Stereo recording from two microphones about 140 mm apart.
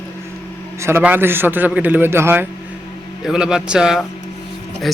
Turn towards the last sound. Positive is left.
turn(degrees=0)  # may be behind; listen again after turning